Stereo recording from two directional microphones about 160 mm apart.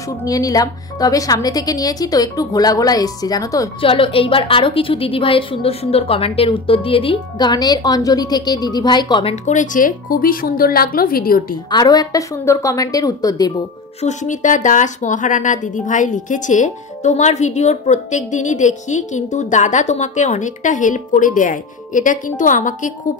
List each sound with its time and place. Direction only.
0.2 s a woman's voice: 20° left (ahead or behind)
3.8 s a woman's voice: 35° left (ahead or behind)
9.3 s speech: 50° left (ahead or behind)
11.7 s a woman's voice: 25° left (ahead or behind)
14.0 s speech: 50° left (ahead or behind)